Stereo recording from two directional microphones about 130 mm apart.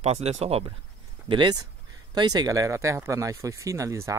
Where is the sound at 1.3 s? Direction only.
35° right (ahead or behind).